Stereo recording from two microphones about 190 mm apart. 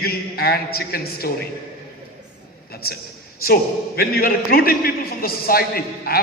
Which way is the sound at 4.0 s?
50° left (ahead or behind).